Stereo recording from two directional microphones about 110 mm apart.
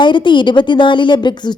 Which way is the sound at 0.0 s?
45° left (ahead or behind).